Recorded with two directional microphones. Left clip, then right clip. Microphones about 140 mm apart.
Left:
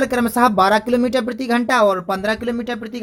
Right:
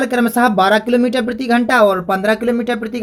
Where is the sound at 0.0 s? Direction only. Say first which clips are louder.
Right 2 dB; 60° left (ahead or behind).